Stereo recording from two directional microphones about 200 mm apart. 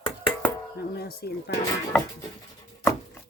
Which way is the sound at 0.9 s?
50° left (ahead or behind).